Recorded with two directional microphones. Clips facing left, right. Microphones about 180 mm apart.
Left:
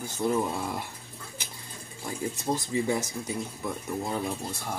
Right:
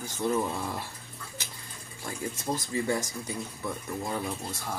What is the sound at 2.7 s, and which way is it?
Speech, 15° left (ahead or behind).